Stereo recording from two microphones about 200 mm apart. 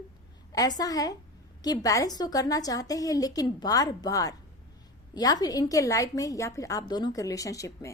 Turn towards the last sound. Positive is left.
turn(degrees=15)  # may be behind; listen again after turning